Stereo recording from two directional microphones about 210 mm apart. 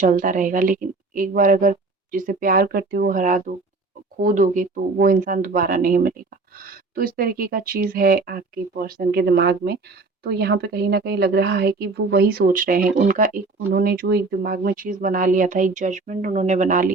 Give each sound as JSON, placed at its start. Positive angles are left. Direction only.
{"t": 0.0, "sound": "a woman's voice", "side_deg": -40}